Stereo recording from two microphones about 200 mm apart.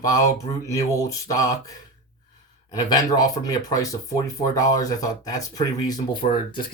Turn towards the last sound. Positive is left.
turn(degrees=25)  # may be behind; listen again after turning